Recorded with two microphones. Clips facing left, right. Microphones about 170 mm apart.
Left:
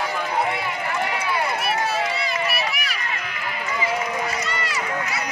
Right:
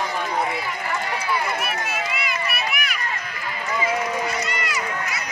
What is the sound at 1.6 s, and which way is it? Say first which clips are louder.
Run: left 4 dB; 35° left (ahead or behind).